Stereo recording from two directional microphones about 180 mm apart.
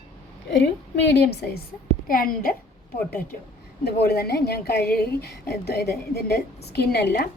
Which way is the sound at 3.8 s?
60° left (ahead or behind).